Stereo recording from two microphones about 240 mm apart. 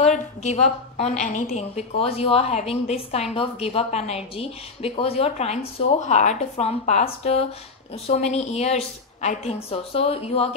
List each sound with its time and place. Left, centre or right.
0.0 s a woman's voice: left